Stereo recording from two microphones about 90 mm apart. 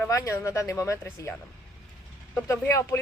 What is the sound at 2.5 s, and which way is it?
Speech, 30° left (ahead or behind).